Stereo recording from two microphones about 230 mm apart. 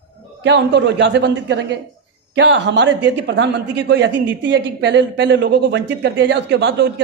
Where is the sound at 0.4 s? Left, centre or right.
Right.